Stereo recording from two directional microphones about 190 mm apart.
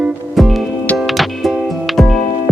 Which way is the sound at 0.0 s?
Centre (ahead or behind).